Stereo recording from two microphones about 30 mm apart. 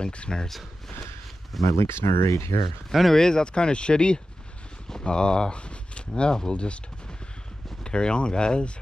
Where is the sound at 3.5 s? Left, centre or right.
Left.